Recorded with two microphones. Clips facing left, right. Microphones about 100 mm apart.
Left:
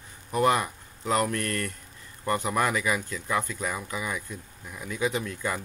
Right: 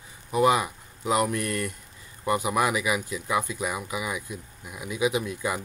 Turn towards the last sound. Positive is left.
turn(degrees=-10)  # may be behind; listen again after turning